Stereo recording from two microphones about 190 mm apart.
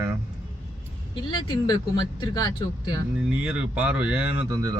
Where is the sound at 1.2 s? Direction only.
25° left (ahead or behind).